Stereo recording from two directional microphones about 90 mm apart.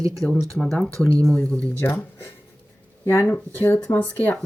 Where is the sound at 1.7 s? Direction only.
25° left (ahead or behind).